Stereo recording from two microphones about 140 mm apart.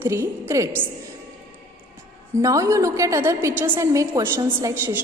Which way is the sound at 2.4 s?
25° right (ahead or behind).